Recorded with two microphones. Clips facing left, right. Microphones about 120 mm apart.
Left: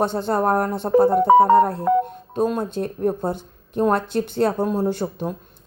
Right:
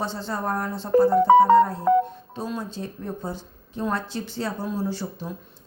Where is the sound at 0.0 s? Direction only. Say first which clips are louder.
Left 8 dB; 55° left (ahead or behind).